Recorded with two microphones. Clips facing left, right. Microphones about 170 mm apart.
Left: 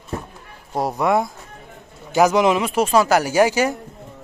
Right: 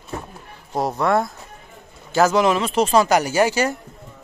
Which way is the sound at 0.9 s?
15° left (ahead or behind).